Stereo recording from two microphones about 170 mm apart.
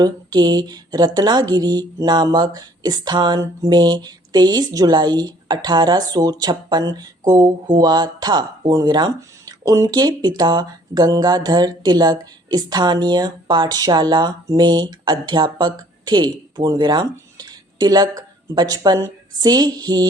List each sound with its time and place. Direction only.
0.0 s a woman's voice: 25° right (ahead or behind)